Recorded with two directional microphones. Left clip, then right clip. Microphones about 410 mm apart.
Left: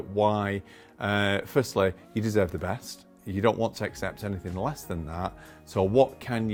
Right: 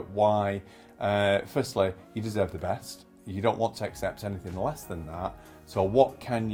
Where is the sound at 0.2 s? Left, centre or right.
Left.